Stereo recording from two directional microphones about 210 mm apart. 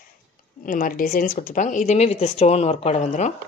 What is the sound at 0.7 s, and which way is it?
Speech, 40° left (ahead or behind).